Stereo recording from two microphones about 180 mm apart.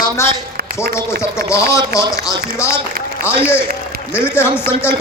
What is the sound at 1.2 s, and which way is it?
Speech, 15° left (ahead or behind).